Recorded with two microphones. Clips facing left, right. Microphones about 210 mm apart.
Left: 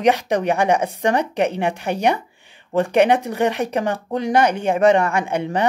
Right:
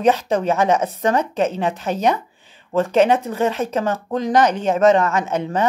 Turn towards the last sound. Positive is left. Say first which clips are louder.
# even
turn(degrees=15)  # may be behind; listen again after turning